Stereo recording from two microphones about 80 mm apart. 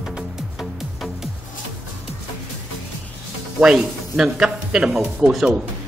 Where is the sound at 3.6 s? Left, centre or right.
Centre.